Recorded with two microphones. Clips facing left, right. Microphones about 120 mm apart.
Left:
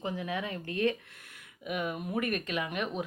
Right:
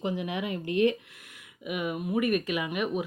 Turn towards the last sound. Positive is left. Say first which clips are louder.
# right 4 dB
turn(degrees=-10)  # may be behind; listen again after turning